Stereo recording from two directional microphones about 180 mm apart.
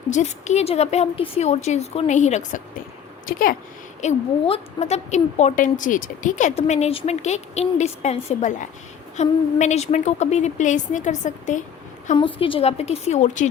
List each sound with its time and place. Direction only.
0.1 s a woman's voice: 40° left (ahead or behind)
3.2 s speech: 50° left (ahead or behind)
4.0 s a woman's voice: 35° left (ahead or behind)
12.1 s a woman's voice: 30° left (ahead or behind)